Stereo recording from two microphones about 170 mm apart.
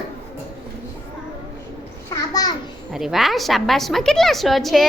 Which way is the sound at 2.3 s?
20° left (ahead or behind).